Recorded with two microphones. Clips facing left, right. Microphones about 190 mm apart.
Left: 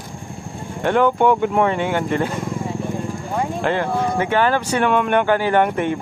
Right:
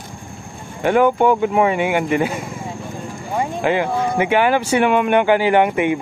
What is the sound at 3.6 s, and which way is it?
Speech, 10° right (ahead or behind).